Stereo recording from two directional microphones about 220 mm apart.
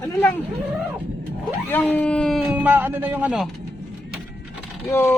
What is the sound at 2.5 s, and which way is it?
Speech, 10° right (ahead or behind).